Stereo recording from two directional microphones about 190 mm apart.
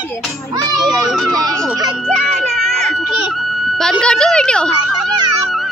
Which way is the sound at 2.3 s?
Centre (ahead or behind).